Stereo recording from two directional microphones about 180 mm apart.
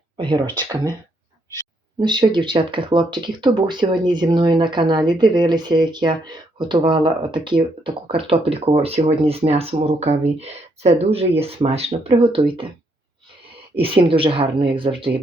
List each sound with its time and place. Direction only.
0.2 s speech: 25° right (ahead or behind)
2.0 s speech: 25° right (ahead or behind)
13.7 s speech: 30° right (ahead or behind)